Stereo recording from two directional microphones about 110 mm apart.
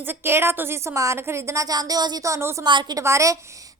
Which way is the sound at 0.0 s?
20° right (ahead or behind).